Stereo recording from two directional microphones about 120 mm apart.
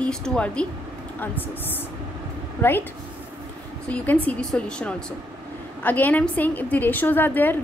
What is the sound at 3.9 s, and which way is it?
A woman's voice, 10° left (ahead or behind).